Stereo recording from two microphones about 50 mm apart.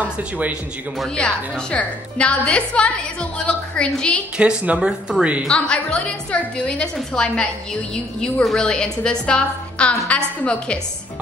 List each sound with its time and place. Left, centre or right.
0.0 s speech: right
1.1 s a woman's voice: left
4.4 s speech: right
5.7 s a woman's voice: left